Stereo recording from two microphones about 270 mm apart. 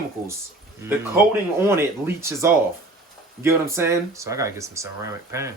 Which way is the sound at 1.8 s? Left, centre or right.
Centre.